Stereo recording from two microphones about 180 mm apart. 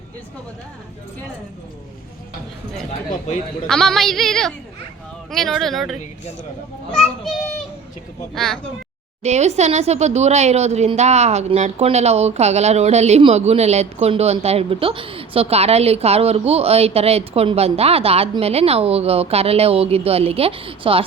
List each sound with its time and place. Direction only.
3.7 s a woman's voice: 5° left (ahead or behind)
6.9 s children playing: centre (ahead or behind)
9.2 s a woman's voice: 40° right (ahead or behind)